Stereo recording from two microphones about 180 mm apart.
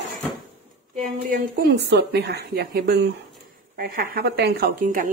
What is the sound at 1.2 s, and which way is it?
A woman's voice, 65° right (ahead or behind).